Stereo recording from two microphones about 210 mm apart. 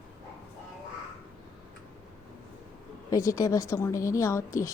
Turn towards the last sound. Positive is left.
turn(degrees=15)  # may be behind; listen again after turning